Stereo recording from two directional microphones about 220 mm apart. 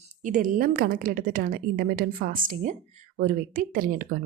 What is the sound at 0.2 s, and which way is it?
A woman's voice, 35° right (ahead or behind).